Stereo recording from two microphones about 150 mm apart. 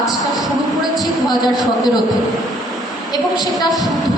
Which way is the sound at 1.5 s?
25° left (ahead or behind).